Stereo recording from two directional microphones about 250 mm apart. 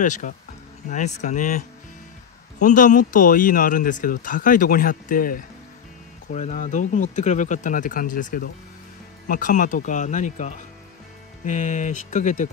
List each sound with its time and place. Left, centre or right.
0.0 s speech: left
2.6 s speech: left